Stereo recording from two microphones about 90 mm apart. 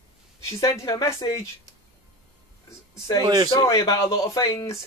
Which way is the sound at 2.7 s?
40° left (ahead or behind).